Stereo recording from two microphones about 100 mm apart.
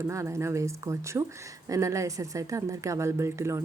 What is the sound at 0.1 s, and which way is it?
Speech, 30° right (ahead or behind).